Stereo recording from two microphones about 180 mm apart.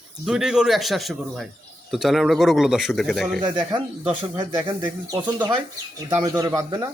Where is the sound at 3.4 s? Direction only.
25° right (ahead or behind).